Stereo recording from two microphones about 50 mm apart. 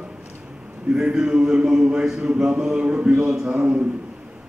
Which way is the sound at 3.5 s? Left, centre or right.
Right.